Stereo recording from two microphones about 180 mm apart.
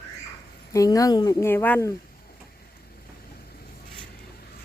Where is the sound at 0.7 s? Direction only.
20° left (ahead or behind).